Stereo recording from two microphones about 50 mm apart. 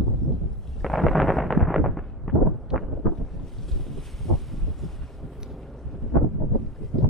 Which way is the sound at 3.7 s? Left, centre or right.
Centre.